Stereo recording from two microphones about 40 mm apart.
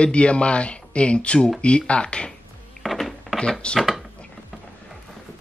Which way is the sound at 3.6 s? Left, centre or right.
Left.